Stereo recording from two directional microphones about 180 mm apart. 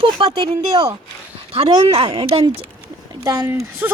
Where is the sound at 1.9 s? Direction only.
30° right (ahead or behind).